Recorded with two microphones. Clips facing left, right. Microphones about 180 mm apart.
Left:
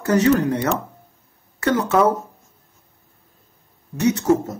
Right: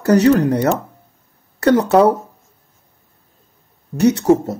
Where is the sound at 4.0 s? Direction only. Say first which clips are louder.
Right 4 dB; 35° right (ahead or behind).